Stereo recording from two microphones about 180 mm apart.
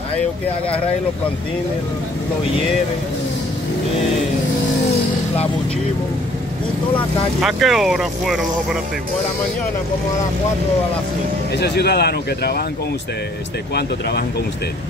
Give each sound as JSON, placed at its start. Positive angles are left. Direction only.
{"t": 7.4, "sound": "speech", "side_deg": 0}
{"t": 11.5, "sound": "speech", "side_deg": 65}
{"t": 13.7, "sound": "speech", "side_deg": 65}